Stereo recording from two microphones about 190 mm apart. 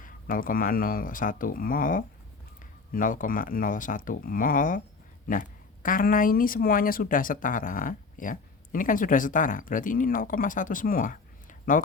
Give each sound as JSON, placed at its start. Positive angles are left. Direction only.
{"t": 0.0, "sound": "speech", "side_deg": 45}